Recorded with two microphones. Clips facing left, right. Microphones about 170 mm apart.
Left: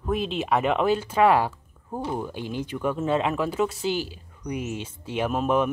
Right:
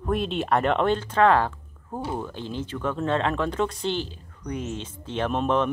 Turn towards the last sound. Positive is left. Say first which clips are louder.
# even
turn(degrees=10)  # may be behind; listen again after turning